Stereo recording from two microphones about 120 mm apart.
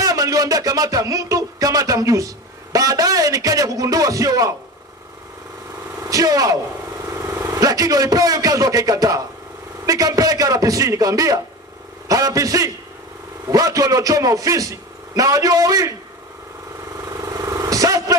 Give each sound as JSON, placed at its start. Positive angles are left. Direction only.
{"t": 0.0, "sound": "speech", "side_deg": -30}
{"t": 5.9, "sound": "a man's voice", "side_deg": -30}
{"t": 17.1, "sound": "vehicle", "side_deg": -30}